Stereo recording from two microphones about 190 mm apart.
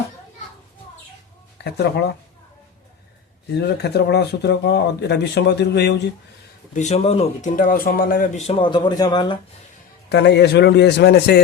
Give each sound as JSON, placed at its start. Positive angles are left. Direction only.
{"t": 1.5, "sound": "speech", "side_deg": 60}
{"t": 3.7, "sound": "speech", "side_deg": 60}
{"t": 6.7, "sound": "speech", "side_deg": 35}
{"t": 10.1, "sound": "speech", "side_deg": 65}